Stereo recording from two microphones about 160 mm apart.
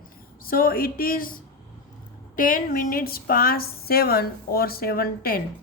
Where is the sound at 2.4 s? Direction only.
60° left (ahead or behind).